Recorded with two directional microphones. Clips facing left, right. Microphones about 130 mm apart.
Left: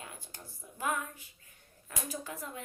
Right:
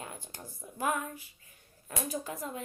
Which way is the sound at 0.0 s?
35° right (ahead or behind).